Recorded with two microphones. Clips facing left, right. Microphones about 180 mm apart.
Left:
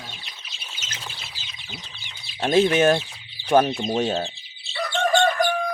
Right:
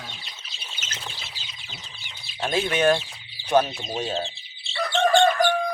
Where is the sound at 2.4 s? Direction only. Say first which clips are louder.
Left 4 dB; 40° left (ahead or behind).